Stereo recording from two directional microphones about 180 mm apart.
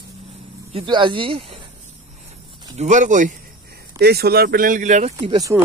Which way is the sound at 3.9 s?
60° right (ahead or behind).